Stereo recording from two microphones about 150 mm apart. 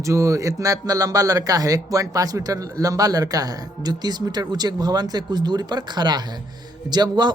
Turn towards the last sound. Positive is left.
turn(degrees=-30)  # may be behind; listen again after turning